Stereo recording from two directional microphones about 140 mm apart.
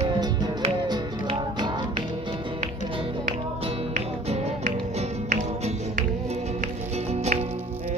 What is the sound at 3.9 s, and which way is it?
Music, 60° right (ahead or behind).